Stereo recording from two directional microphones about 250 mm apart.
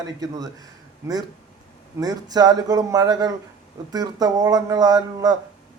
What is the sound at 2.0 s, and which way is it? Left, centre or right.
Speech, centre.